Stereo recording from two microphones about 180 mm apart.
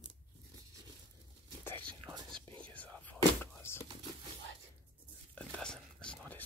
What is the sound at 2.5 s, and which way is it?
Whispering, 10° left (ahead or behind).